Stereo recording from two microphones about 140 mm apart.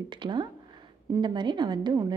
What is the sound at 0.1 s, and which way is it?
Speech, 35° right (ahead or behind).